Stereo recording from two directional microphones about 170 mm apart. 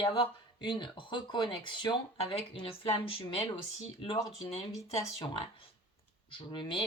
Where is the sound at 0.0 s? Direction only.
30° left (ahead or behind).